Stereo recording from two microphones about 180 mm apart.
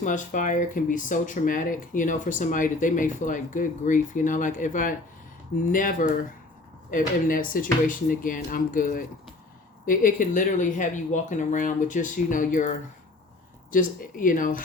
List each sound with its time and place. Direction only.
0.0 s speech: 45° left (ahead or behind)